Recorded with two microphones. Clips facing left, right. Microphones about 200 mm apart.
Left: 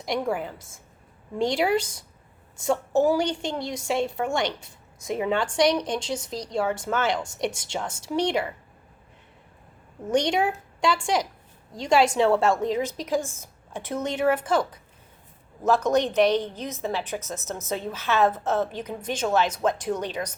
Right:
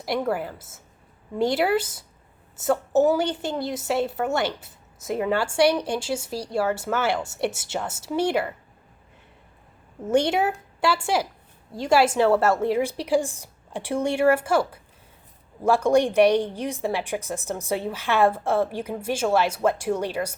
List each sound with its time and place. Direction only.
0.0 s a woman's voice: 5° right (ahead or behind)
10.1 s a woman's voice: 5° right (ahead or behind)